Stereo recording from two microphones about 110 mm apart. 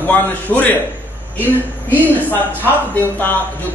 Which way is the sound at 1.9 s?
20° left (ahead or behind).